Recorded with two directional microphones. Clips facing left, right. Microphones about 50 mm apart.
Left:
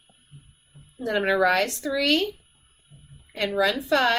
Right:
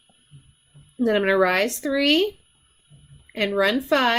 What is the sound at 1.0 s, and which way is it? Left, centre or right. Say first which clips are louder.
Speech: right 2 dB; right.